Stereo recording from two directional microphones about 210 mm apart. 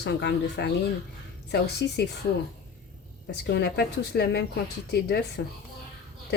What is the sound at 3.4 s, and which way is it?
A woman's voice, 55° left (ahead or behind).